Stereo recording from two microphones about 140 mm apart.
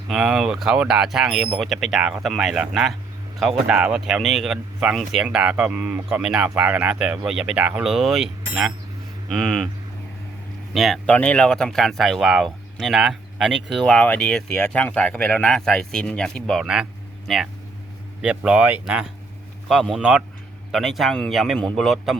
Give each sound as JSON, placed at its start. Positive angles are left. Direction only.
{"t": 0.1, "sound": "speech", "side_deg": -5}
{"t": 10.8, "sound": "speech", "side_deg": 0}